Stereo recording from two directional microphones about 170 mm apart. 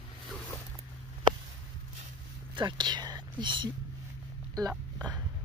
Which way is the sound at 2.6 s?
25° right (ahead or behind).